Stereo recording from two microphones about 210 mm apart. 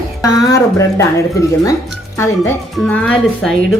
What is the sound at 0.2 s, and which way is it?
Speech, 15° left (ahead or behind).